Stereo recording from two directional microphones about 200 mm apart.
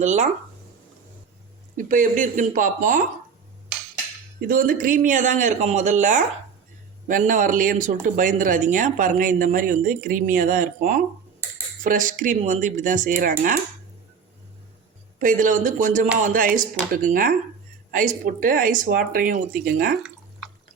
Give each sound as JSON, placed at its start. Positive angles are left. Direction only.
{"t": 0.0, "sound": "speech", "side_deg": -35}
{"t": 1.7, "sound": "speech", "side_deg": -40}
{"t": 4.4, "sound": "speech", "side_deg": -45}
{"t": 15.2, "sound": "speech", "side_deg": -40}